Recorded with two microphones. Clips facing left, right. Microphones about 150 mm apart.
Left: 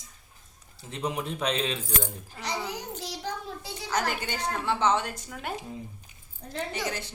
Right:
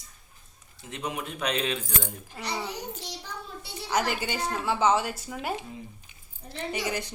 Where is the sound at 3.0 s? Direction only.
90° left.